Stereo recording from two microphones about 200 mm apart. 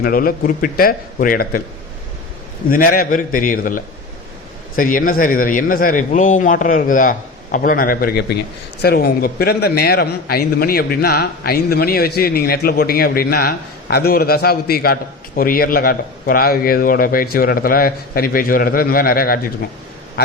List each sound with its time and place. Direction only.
0.0 s a man's voice: 45° left (ahead or behind)
2.6 s a man's voice: 45° left (ahead or behind)